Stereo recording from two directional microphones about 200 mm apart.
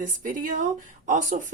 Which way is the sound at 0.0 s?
40° right (ahead or behind).